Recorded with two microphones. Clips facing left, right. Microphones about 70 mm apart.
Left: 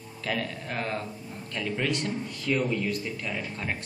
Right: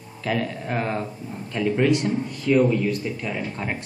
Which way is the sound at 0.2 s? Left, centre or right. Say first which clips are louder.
Right 6 dB; centre.